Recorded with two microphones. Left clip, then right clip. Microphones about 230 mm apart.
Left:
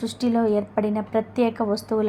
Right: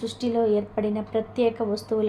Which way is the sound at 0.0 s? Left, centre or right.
Left.